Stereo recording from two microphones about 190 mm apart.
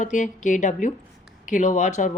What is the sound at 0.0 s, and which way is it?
Speech, 40° left (ahead or behind).